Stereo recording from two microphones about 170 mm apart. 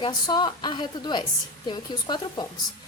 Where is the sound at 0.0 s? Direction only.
25° left (ahead or behind).